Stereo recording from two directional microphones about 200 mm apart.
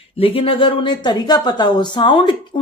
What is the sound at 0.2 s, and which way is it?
Speech, 25° left (ahead or behind).